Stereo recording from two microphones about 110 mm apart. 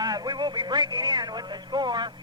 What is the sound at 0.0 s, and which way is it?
A man's voice, 40° right (ahead or behind).